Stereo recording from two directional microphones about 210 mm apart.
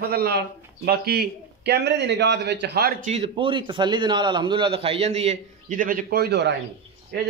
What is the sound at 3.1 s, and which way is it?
A man's voice, 25° right (ahead or behind).